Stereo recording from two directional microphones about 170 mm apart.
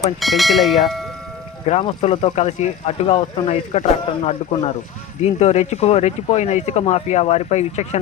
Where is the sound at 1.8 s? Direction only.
35° left (ahead or behind).